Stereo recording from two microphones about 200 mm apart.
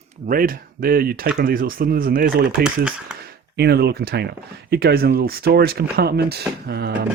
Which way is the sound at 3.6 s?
55° right (ahead or behind).